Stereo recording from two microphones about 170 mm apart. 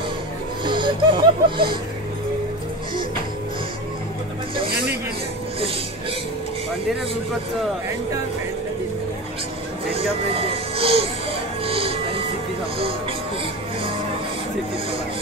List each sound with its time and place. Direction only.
0.7 s speech: 30° right (ahead or behind)
4.6 s a sound: 60° right (ahead or behind)
9.9 s speech: 35° right (ahead or behind)
11.6 s music: 35° right (ahead or behind)